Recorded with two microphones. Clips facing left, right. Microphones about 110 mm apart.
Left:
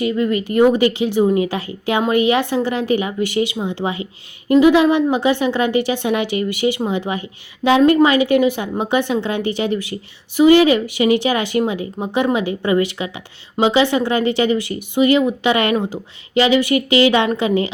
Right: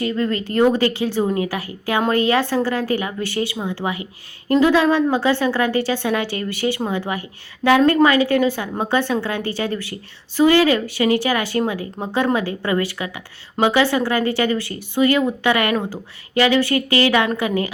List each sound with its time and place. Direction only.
0.0 s a woman's voice: 15° left (ahead or behind)